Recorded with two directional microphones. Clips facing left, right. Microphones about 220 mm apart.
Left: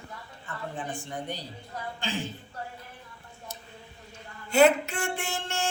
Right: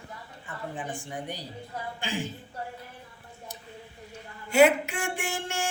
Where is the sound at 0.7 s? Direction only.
10° right (ahead or behind).